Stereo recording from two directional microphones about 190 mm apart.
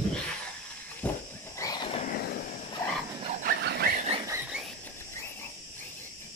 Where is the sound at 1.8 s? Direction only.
30° left (ahead or behind).